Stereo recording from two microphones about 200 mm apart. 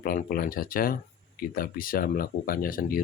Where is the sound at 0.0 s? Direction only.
45° left (ahead or behind).